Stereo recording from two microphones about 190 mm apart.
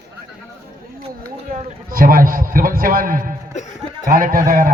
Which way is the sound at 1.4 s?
50° right (ahead or behind).